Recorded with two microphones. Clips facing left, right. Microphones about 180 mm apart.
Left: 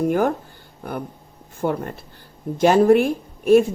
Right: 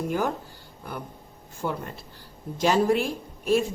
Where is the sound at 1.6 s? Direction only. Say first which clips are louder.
Left 7 dB; 50° left (ahead or behind).